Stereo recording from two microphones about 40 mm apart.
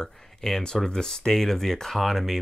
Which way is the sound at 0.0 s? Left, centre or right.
Centre.